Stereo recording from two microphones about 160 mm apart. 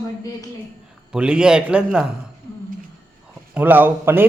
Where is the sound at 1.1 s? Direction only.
5° right (ahead or behind).